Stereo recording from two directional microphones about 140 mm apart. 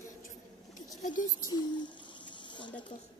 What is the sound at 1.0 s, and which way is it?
Speech, 70° left (ahead or behind).